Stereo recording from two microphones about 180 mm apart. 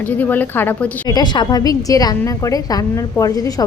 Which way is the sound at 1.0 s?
25° left (ahead or behind).